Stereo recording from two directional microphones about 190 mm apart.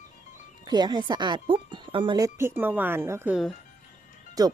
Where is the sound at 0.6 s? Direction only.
20° right (ahead or behind).